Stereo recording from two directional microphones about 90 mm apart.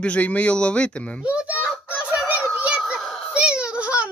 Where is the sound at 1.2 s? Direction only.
10° right (ahead or behind).